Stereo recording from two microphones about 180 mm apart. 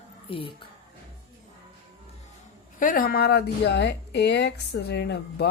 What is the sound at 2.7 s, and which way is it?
Speech, 50° left (ahead or behind).